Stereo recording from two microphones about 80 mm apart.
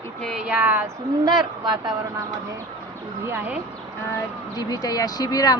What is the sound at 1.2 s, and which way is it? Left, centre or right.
Speech, right.